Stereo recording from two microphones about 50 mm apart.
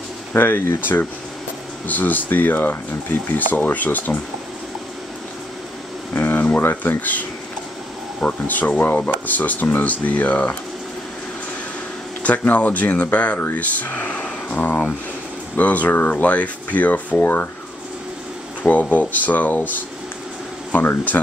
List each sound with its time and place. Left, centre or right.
0.3 s speech: left
1.9 s speech: left
6.1 s a sound: left
6.7 s speech: left
8.5 s speech: left
12.2 s speech: left
18.6 s speech: left
20.8 s speech: left